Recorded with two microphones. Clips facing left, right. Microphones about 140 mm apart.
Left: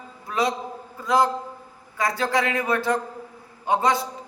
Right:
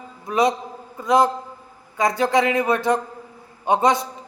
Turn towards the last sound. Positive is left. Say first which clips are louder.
# right 3 dB
turn(degrees=-20)  # may be behind; listen again after turning